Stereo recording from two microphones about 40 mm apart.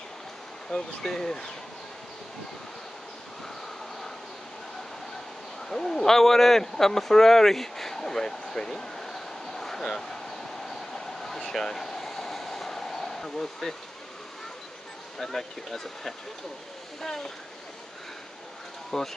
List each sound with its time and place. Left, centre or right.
0.7 s speech: centre
5.7 s speech: centre
10.7 s train: centre
11.5 s a sound: centre
15.1 s speech: centre
18.9 s speech: centre